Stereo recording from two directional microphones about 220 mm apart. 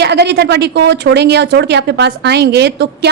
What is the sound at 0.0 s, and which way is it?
Speech, 50° right (ahead or behind).